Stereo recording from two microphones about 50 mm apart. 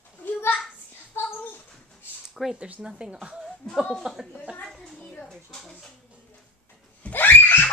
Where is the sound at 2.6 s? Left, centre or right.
Centre.